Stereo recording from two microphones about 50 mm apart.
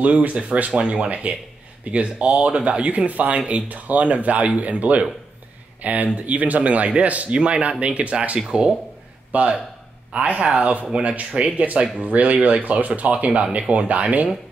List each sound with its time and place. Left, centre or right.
0.0 s speech: right
9.3 s speech: right